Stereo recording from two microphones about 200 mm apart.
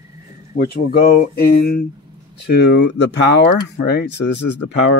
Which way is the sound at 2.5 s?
55° left (ahead or behind).